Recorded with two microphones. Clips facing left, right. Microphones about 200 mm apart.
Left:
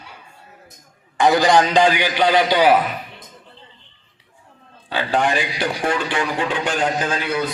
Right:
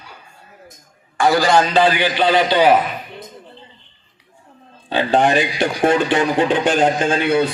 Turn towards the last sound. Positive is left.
turn(degrees=-30)  # may be behind; listen again after turning